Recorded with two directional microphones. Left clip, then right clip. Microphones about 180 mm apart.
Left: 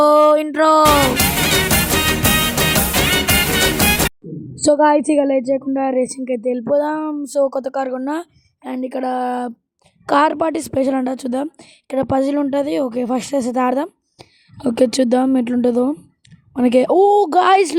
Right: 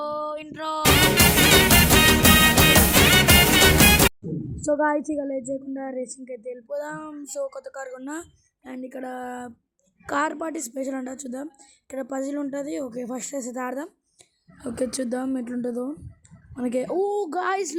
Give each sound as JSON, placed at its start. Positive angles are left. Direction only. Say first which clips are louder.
{"t": 0.0, "sound": "a sound", "louder": "left 18 dB", "side_deg": 65}
{"t": 0.4, "sound": "music", "louder": "left 17 dB", "side_deg": 55}
{"t": 0.8, "sound": "music", "louder": "left 6 dB", "side_deg": 0}
{"t": 4.6, "sound": "a woman's voice", "louder": "left 10 dB", "side_deg": 40}